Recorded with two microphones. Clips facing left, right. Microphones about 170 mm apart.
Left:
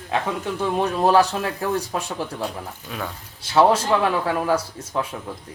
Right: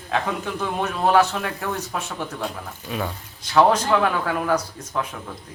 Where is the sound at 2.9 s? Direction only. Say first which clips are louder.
Right 4 dB; 5° right (ahead or behind).